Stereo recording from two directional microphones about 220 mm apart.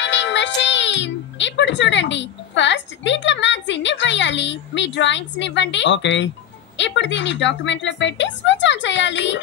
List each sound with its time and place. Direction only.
0.0 s a child's voice: 55° left (ahead or behind)